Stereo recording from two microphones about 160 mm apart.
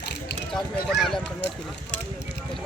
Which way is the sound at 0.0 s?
90° left.